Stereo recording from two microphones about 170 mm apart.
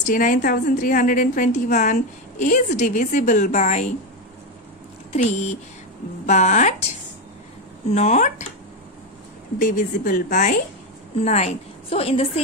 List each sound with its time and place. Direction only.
0.0 s a woman's voice: 50° left (ahead or behind)
5.1 s a woman's voice: 40° left (ahead or behind)
7.9 s a woman's voice: 40° left (ahead or behind)
9.6 s a woman's voice: 50° left (ahead or behind)
11.2 s a woman's voice: 40° left (ahead or behind)